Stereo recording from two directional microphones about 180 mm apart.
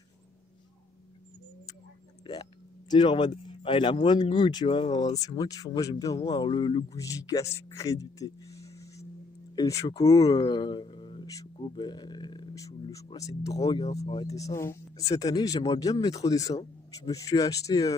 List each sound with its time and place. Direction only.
2.9 s speech: 25° left (ahead or behind)